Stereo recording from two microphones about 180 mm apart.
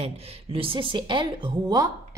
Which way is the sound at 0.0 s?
35° right (ahead or behind).